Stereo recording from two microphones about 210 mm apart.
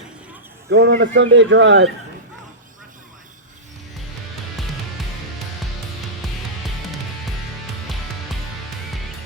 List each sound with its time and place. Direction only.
0.7 s speech: 55° right (ahead or behind)